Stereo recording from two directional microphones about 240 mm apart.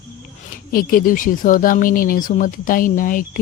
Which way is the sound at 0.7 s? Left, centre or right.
Left.